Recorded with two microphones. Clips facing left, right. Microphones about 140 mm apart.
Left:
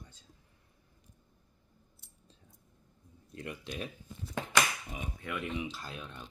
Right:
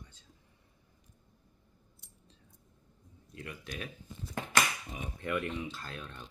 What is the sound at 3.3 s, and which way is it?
Speech, 25° left (ahead or behind).